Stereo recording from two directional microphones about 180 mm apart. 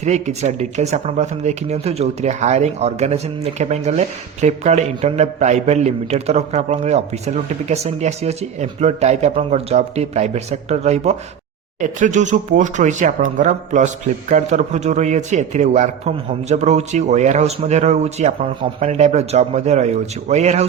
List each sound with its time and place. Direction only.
0.0 s speech: 40° right (ahead or behind)